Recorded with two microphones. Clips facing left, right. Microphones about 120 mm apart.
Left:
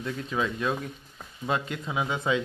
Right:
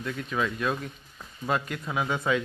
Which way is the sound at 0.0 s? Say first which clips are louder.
Even; 25° left (ahead or behind).